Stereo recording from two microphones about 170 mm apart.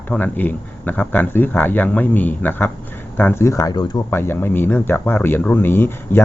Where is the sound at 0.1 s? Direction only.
10° left (ahead or behind).